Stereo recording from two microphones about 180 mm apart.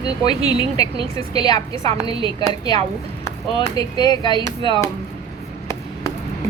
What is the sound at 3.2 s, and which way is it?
A woman's voice, 20° left (ahead or behind).